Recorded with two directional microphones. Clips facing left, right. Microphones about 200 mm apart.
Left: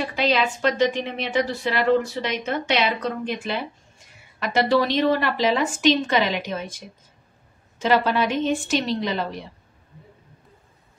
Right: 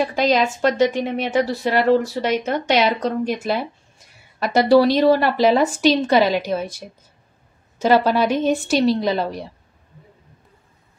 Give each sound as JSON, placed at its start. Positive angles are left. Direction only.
{"t": 0.0, "sound": "a woman's voice", "side_deg": -45}
{"t": 7.8, "sound": "a woman's voice", "side_deg": -35}